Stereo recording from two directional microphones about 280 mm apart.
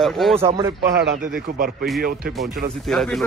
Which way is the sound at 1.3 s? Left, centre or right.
Right.